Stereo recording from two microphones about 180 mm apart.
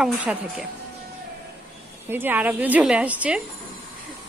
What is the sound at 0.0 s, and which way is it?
Speech, 5° right (ahead or behind).